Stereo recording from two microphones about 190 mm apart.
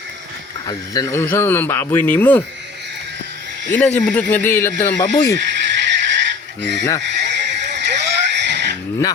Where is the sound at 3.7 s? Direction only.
10° left (ahead or behind).